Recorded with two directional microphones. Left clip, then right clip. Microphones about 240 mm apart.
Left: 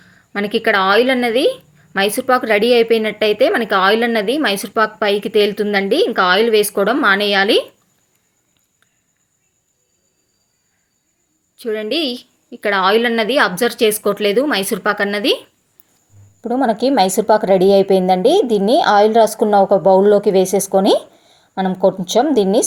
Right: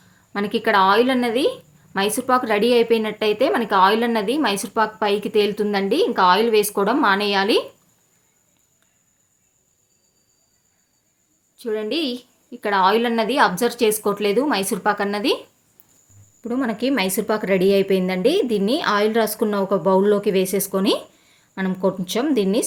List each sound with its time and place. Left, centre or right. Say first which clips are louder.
0.0 s speech: left 4 dB; centre
11.5 s speech: left 4 dB; centre
16.4 s speech: left 8 dB; centre